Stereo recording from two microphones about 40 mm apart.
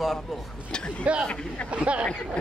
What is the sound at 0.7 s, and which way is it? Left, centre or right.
Speech, left.